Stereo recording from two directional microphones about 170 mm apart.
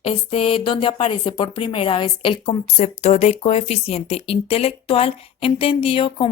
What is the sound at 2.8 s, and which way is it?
A woman's voice, 40° left (ahead or behind).